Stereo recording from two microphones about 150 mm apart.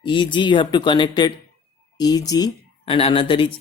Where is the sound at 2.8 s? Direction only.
40° left (ahead or behind).